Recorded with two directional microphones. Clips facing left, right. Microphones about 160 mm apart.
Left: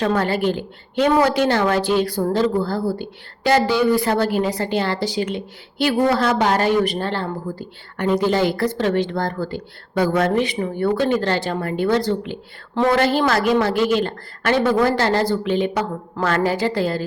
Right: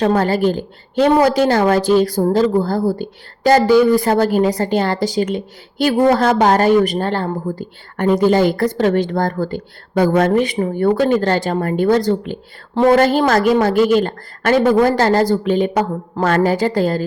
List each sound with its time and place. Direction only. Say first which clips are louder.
0.0 s speech: right 4 dB; 35° right (ahead or behind)